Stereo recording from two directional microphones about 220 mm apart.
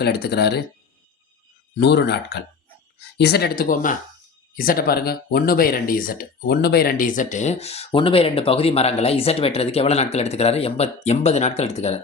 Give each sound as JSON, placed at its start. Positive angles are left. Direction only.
{"t": 0.0, "sound": "speech", "side_deg": 50}
{"t": 1.8, "sound": "speech", "side_deg": 50}